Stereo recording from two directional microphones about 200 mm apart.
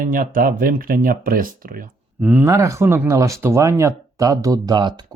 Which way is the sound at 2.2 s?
10° right (ahead or behind).